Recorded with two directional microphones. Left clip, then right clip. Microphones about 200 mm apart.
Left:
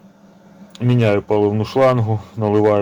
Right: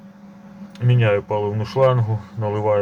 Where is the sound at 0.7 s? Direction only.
55° left (ahead or behind).